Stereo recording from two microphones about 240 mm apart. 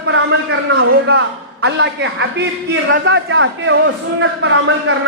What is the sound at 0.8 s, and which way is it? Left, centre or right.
A man's voice, right.